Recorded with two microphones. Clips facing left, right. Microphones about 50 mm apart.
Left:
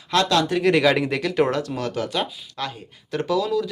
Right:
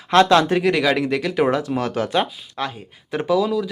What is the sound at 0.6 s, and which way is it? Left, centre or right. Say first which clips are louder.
Speech: even; centre.